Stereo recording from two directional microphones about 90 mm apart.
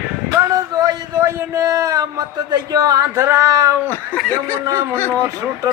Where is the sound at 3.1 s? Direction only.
30° right (ahead or behind).